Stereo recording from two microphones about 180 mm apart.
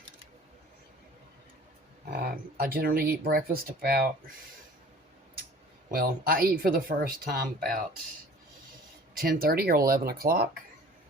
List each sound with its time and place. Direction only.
2.6 s speech: 55° right (ahead or behind)
5.9 s speech: 55° right (ahead or behind)
9.1 s speech: 55° right (ahead or behind)